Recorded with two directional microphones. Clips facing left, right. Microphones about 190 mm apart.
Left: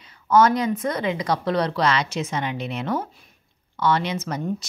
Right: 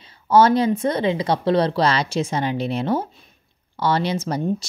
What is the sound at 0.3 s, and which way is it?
A woman's voice, 30° right (ahead or behind).